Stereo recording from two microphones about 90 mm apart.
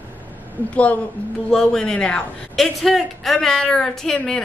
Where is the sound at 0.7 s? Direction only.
15° left (ahead or behind).